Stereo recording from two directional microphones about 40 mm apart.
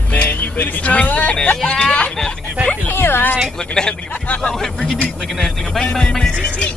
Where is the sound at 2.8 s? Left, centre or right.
Left.